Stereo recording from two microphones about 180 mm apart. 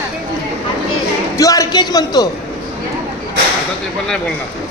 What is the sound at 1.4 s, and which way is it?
Speech, 20° left (ahead or behind).